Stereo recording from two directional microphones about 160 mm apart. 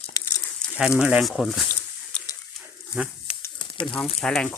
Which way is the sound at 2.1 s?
5° left (ahead or behind).